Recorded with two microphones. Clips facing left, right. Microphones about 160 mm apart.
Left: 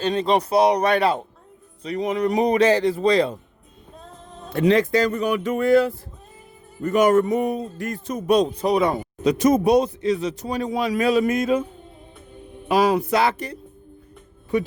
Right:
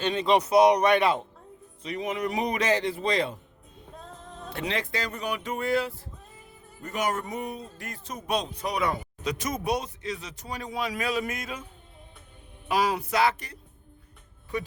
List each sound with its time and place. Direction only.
0.0 s speech: 35° left (ahead or behind)
4.4 s speech: 45° left (ahead or behind)
8.5 s a man's voice: 30° left (ahead or behind)
13.0 s speech: 30° left (ahead or behind)